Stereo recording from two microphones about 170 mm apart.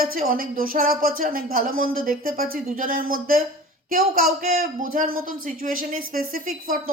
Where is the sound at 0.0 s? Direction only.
60° right (ahead or behind).